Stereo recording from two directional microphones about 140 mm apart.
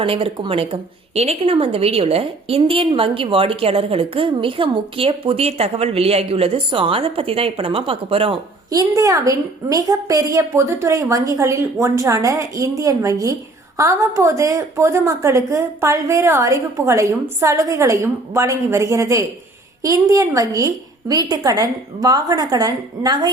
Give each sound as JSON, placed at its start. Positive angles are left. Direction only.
{"t": 0.0, "sound": "a woman's voice", "side_deg": -40}
{"t": 8.7, "sound": "a woman's voice", "side_deg": -25}